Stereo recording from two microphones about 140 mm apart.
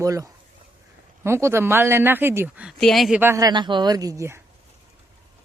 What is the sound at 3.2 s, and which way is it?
Speech, 20° right (ahead or behind).